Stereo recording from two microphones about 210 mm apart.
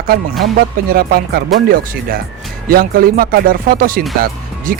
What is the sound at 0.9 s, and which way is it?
Speech, 45° right (ahead or behind).